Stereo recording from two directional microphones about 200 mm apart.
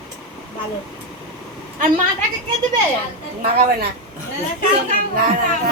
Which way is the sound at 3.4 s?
50° right (ahead or behind).